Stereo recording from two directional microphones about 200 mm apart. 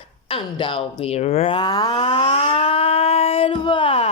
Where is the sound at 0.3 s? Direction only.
25° left (ahead or behind).